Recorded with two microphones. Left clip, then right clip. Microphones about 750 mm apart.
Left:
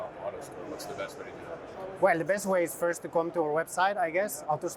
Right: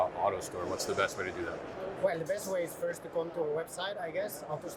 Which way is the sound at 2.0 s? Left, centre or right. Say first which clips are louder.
Left 7 dB; left.